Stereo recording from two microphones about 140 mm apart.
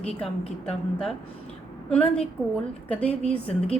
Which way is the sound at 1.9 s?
10° left (ahead or behind).